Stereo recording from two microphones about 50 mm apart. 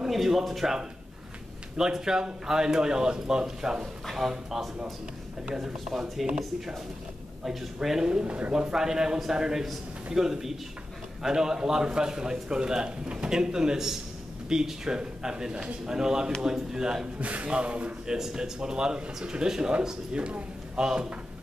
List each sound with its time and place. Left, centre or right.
0.0 s speech: centre
1.8 s a man's voice: centre
8.5 s a man's voice: centre
17.2 s a man's voice: right; by 21.1 s centre